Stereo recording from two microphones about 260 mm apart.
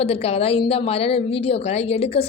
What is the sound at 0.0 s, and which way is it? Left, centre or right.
A woman's voice, left.